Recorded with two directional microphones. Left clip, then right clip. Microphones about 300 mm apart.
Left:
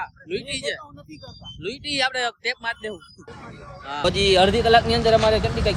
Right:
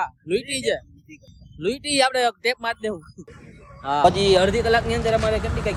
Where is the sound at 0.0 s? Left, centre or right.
Centre.